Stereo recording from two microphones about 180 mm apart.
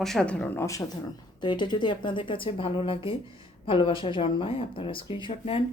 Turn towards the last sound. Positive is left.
turn(degrees=30)  # may be behind; listen again after turning